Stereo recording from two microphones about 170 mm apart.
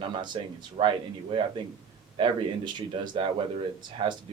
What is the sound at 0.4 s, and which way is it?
Speech, 30° right (ahead or behind).